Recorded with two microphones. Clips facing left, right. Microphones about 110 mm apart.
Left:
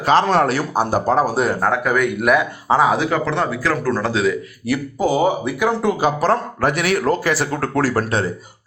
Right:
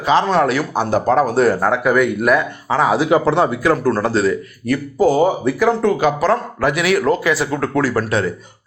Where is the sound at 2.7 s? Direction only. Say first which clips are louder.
Left 2 dB; 25° left (ahead or behind).